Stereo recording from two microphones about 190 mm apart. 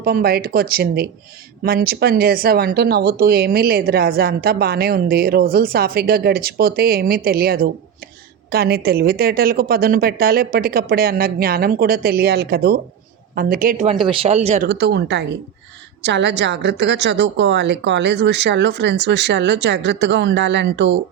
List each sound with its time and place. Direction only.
0.0 s speech: 50° right (ahead or behind)
14.0 s speech: 30° right (ahead or behind)
14.7 s a woman's voice: 60° right (ahead or behind)